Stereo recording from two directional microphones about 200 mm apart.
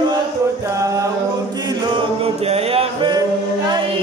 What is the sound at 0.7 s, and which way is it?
Music, 15° right (ahead or behind).